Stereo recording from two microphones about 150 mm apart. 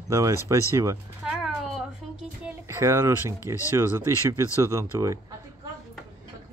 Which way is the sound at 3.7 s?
15° right (ahead or behind).